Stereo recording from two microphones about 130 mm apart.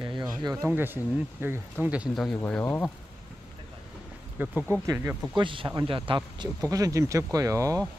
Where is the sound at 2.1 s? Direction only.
5° left (ahead or behind).